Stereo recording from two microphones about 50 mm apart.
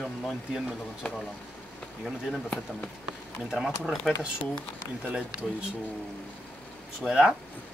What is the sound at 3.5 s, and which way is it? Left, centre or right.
Speech, centre.